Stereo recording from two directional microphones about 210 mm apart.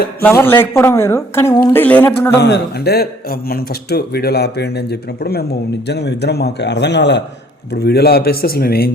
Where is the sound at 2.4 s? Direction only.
55° left (ahead or behind).